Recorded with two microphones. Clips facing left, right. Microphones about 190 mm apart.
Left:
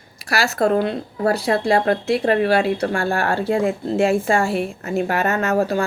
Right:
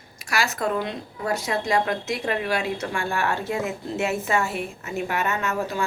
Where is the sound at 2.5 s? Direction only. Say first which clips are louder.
Left 8 dB; 35° left (ahead or behind).